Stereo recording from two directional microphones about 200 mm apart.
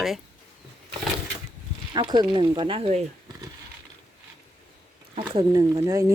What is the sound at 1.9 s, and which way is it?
Speech, 20° right (ahead or behind).